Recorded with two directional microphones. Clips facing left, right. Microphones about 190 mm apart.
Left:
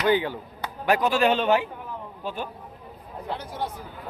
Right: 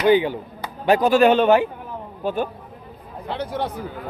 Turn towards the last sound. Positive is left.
turn(degrees=-70)  # may be behind; listen again after turning